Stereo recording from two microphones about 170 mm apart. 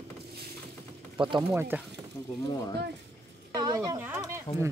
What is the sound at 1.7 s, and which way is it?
Speech, 10° right (ahead or behind).